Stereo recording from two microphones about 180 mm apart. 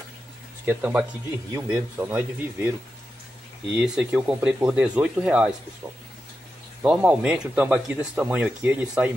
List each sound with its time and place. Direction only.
0.7 s speech: 10° right (ahead or behind)
3.7 s speech: 5° right (ahead or behind)
6.8 s speech: 5° right (ahead or behind)